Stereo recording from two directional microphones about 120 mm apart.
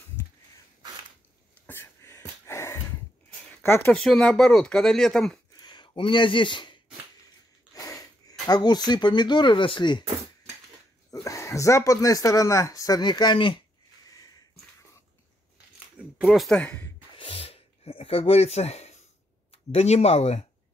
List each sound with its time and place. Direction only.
1.7 s a sound: 20° left (ahead or behind)
3.6 s speech: 20° left (ahead or behind)
3.9 s speech: 5° left (ahead or behind)
5.6 s speech: 40° left (ahead or behind)
7.7 s speech: 30° left (ahead or behind)
11.2 s speech: 25° left (ahead or behind); by 13.6 s 40° left (ahead or behind)
14.0 s a sound: 30° left (ahead or behind)
16.0 s speech: 5° right (ahead or behind); by 16.9 s 10° left (ahead or behind)
17.2 s a sound: 50° left (ahead or behind)
19.5 s speech: 60° left (ahead or behind)